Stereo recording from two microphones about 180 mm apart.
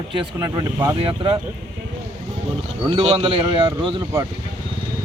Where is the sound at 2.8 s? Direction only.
30° right (ahead or behind).